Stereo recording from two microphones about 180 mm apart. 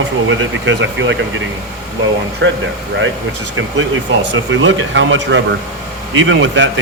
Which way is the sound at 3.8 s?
90° right.